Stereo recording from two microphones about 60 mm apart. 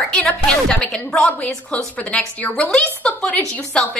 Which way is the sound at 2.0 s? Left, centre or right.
Left.